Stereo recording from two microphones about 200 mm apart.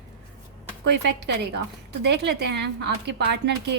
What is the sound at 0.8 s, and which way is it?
A woman's voice, 55° right (ahead or behind).